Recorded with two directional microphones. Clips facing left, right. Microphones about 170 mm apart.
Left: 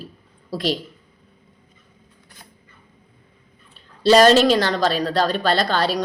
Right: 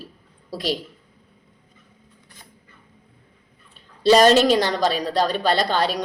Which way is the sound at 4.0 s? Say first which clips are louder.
Left 1 dB; 15° right (ahead or behind).